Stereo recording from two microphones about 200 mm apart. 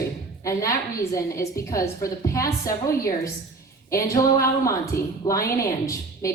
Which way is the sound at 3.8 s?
15° left (ahead or behind).